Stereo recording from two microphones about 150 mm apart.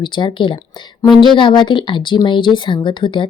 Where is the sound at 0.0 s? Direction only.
30° left (ahead or behind).